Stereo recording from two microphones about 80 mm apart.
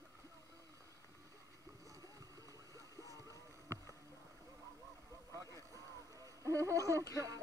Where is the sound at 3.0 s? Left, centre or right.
Left.